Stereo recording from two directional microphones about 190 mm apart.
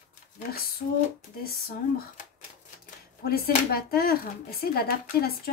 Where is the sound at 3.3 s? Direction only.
55° left (ahead or behind).